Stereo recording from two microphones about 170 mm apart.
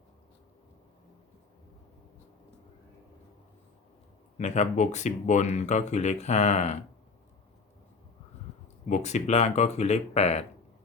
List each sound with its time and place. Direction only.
4.4 s speech: 45° left (ahead or behind)
8.9 s speech: 40° left (ahead or behind)